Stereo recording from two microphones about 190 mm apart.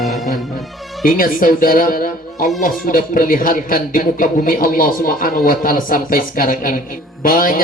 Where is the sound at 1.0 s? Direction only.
50° left (ahead or behind).